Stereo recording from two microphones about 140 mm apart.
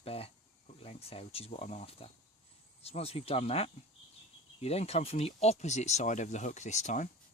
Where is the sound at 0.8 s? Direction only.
45° left (ahead or behind).